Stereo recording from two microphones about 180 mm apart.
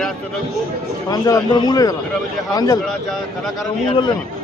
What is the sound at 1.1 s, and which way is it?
A man's voice, 20° left (ahead or behind).